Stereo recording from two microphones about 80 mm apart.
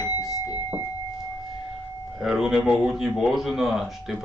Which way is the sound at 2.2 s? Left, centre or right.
Centre.